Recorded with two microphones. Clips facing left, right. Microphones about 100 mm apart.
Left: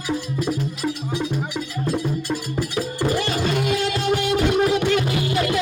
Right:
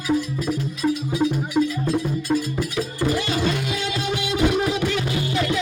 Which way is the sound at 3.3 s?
50° left (ahead or behind).